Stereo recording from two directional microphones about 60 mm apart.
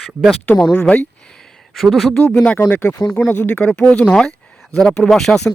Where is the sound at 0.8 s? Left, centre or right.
Left.